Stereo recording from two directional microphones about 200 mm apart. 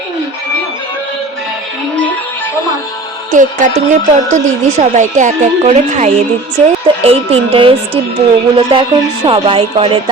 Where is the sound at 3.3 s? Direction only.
40° right (ahead or behind).